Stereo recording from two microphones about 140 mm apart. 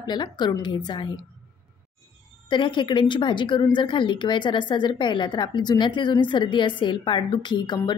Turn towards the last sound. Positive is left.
turn(degrees=35)  # may be behind; listen again after turning